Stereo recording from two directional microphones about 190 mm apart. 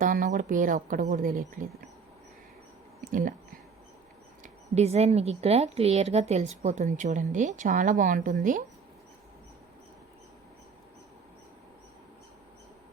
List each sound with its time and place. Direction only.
0.0 s speech: 45° right (ahead or behind)
3.0 s speech: 45° right (ahead or behind)
4.7 s a woman's voice: 35° right (ahead or behind)